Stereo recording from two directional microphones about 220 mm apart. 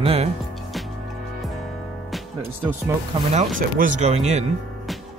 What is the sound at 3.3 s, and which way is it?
Speech, 35° right (ahead or behind).